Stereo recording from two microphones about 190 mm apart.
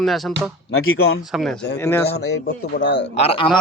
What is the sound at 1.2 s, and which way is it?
Speech, centre (ahead or behind).